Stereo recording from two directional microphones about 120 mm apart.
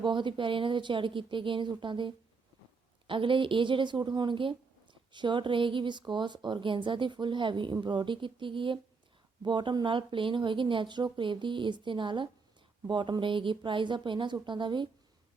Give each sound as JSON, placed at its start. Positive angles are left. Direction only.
{"t": 0.0, "sound": "a woman's voice", "side_deg": -40}